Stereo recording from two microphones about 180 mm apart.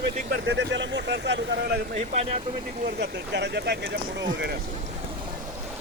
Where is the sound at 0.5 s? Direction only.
85° right.